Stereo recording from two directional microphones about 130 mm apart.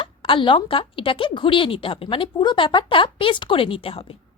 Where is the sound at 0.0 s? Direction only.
40° left (ahead or behind).